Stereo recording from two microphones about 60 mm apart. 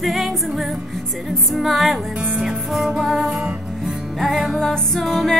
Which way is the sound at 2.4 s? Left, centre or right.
Centre.